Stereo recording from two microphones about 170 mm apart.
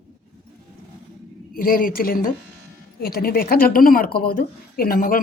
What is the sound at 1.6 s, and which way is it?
A woman's voice, 55° left (ahead or behind).